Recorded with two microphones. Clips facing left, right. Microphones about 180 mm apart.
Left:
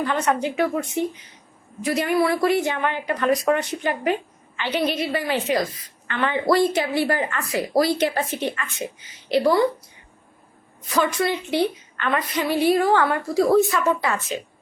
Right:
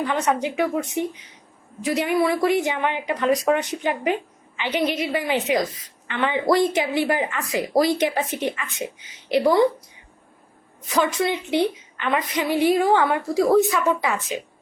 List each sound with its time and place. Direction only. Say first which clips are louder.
0.0 s a woman's voice: even; 15° right (ahead or behind)
10.8 s a woman's voice: even; 15° right (ahead or behind)